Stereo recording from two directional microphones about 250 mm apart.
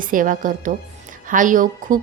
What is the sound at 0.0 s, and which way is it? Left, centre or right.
A woman's voice, right.